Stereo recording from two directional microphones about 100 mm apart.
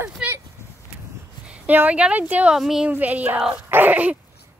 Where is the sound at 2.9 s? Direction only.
15° right (ahead or behind).